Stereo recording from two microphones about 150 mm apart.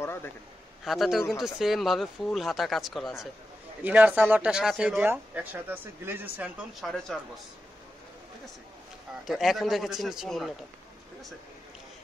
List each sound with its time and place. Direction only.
0.0 s a sound: 15° left (ahead or behind)
0.8 s speech: centre (ahead or behind)
3.8 s speech: 10° right (ahead or behind)
6.8 s speech: 5° left (ahead or behind)
9.2 s speech: centre (ahead or behind)